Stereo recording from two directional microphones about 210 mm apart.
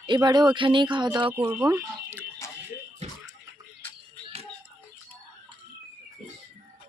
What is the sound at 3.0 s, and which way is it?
Bathtub, 30° right (ahead or behind).